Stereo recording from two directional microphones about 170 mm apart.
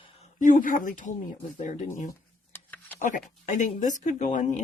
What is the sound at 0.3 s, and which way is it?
Speech, 50° left (ahead or behind).